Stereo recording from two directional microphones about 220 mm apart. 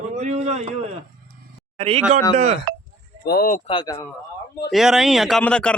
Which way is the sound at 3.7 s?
25° left (ahead or behind).